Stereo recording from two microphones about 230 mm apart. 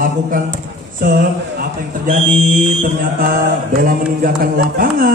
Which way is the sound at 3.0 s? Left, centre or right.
Right.